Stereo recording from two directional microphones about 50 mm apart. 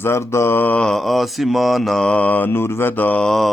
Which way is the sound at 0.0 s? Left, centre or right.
Left.